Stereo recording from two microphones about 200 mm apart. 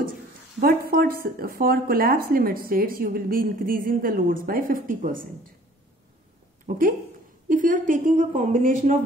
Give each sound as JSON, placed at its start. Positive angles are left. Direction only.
{"t": 0.6, "sound": "speech", "side_deg": -45}
{"t": 6.6, "sound": "a woman's voice", "side_deg": -45}